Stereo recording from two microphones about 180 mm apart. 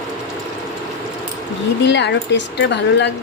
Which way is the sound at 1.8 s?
75° left (ahead or behind).